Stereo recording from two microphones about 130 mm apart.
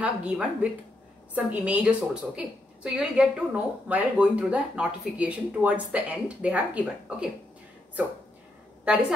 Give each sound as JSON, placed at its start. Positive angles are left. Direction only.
{"t": 0.0, "sound": "speech", "side_deg": -10}